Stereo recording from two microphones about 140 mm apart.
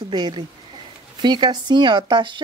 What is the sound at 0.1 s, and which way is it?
Speech, 30° right (ahead or behind).